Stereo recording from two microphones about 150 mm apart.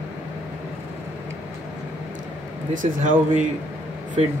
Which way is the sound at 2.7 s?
60° right (ahead or behind).